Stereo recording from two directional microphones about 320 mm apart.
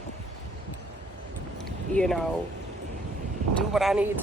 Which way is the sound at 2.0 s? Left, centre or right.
Centre.